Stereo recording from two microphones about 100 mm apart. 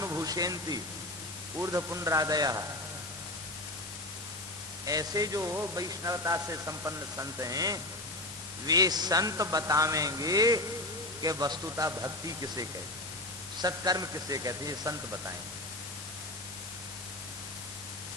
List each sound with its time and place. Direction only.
0.0 s pink noise: 35° right (ahead or behind)
1.5 s a man's voice: 30° right (ahead or behind)
4.9 s a man's voice: 40° right (ahead or behind)
11.9 s a man's voice: 30° right (ahead or behind)